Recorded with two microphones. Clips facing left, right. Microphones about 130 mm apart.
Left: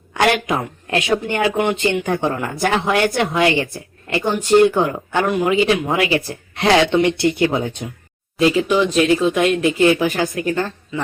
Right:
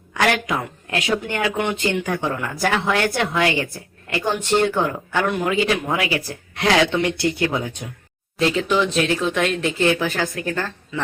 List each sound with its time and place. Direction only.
0.1 s speech: 25° left (ahead or behind)
8.4 s speech: 5° left (ahead or behind)